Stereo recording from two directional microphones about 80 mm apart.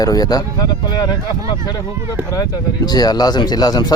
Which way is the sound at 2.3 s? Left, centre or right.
Left.